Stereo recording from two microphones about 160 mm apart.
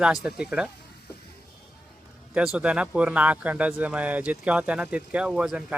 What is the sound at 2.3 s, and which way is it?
Speech, 5° right (ahead or behind).